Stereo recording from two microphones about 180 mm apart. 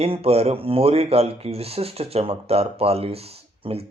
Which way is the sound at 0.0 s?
35° right (ahead or behind).